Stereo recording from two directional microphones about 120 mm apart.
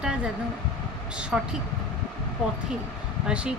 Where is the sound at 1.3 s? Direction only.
10° right (ahead or behind).